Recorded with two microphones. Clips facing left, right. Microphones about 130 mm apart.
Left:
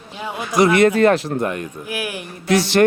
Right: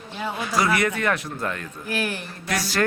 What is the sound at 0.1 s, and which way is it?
Speech, 15° left (ahead or behind).